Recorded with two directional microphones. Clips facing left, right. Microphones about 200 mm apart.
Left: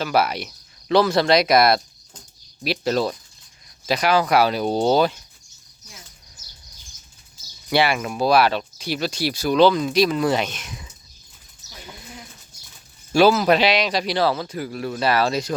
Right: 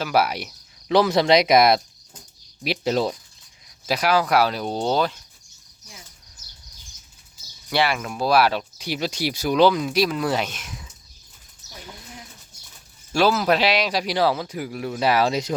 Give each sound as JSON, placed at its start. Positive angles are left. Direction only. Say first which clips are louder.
{"t": 0.0, "sound": "speech", "louder": "left 1 dB", "side_deg": -10}
{"t": 3.8, "sound": "speech", "louder": "left 1 dB", "side_deg": -5}
{"t": 7.7, "sound": "speech", "louder": "left 3 dB", "side_deg": 5}
{"t": 13.1, "sound": "speech", "louder": "left 4 dB", "side_deg": 0}